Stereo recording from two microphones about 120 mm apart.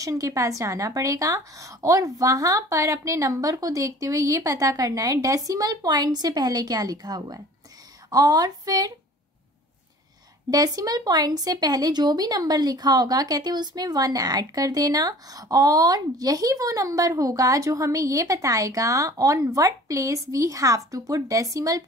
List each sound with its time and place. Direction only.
0.0 s a woman's voice: 30° right (ahead or behind)
10.5 s speech: 30° right (ahead or behind)